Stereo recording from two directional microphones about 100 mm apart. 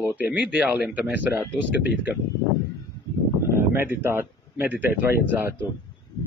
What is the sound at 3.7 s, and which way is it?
Speech, 25° right (ahead or behind).